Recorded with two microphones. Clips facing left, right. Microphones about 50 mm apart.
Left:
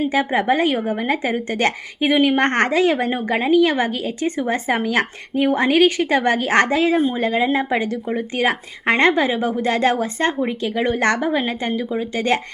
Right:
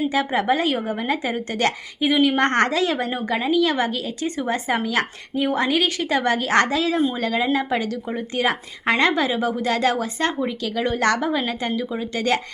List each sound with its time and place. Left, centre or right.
0.0 s a woman's voice: left
2.0 s a woman's voice: left